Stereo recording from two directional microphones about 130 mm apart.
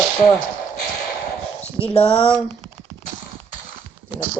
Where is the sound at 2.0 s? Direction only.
5° left (ahead or behind).